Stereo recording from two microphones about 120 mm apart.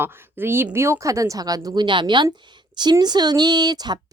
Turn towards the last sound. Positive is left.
turn(degrees=-35)  # may be behind; listen again after turning